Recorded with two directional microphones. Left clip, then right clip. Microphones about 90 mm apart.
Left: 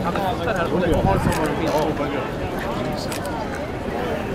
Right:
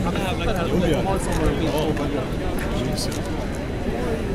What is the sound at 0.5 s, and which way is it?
Speech, 30° right (ahead or behind).